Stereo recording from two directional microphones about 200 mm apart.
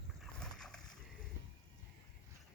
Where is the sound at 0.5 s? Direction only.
Centre (ahead or behind).